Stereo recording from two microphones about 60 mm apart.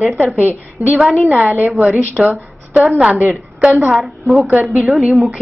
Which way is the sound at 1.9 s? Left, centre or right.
Right.